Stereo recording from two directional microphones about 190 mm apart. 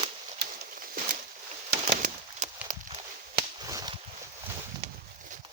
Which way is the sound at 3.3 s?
20° right (ahead or behind).